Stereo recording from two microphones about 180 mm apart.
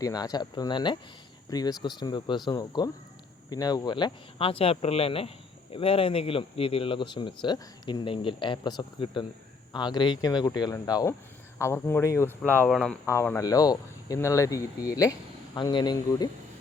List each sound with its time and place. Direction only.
0.0 s speech: 20° left (ahead or behind)